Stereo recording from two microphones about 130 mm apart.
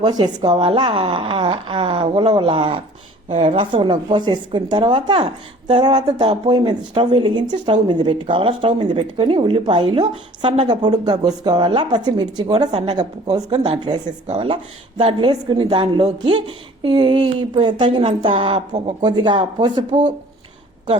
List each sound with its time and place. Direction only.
0.0 s a woman's voice: 30° right (ahead or behind)